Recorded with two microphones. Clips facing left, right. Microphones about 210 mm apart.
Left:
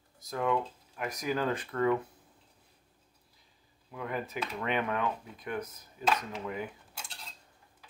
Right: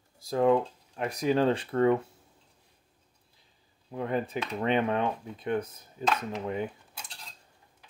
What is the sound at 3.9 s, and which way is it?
Speech, 30° right (ahead or behind).